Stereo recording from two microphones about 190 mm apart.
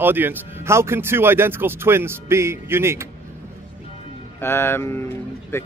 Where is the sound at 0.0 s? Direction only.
10° right (ahead or behind).